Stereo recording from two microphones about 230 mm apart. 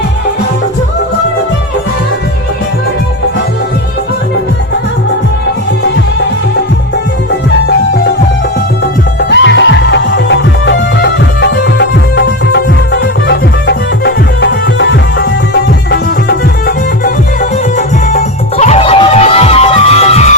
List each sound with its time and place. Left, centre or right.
9.3 s music: left